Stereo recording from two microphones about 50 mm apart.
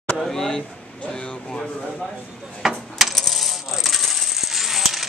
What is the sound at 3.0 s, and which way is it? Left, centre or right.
Coin, centre.